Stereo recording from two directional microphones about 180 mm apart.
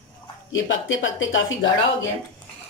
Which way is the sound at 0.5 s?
90° left.